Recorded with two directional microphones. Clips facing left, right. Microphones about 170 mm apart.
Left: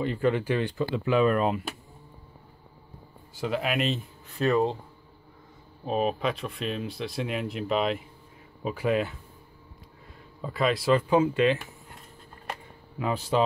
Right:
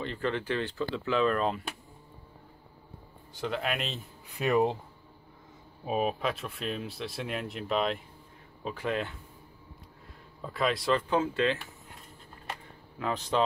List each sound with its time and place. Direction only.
0.0 s speech: 10° left (ahead or behind)
3.3 s speech: 5° left (ahead or behind)
4.4 s speech: 15° right (ahead or behind)
5.9 s speech: 5° right (ahead or behind)
10.4 s speech: centre (ahead or behind)
13.0 s speech: 10° left (ahead or behind)